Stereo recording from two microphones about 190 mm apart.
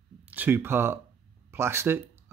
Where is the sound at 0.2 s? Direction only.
10° right (ahead or behind).